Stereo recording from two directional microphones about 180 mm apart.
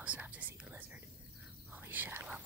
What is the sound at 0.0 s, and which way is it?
Whispering, 5° right (ahead or behind).